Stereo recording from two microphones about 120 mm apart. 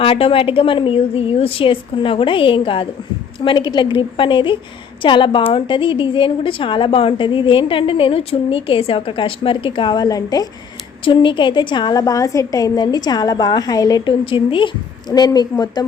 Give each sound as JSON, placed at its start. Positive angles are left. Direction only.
{"t": 0.0, "sound": "a woman's voice", "side_deg": 50}
{"t": 11.0, "sound": "a woman's voice", "side_deg": 45}
{"t": 14.1, "sound": "a woman's voice", "side_deg": 45}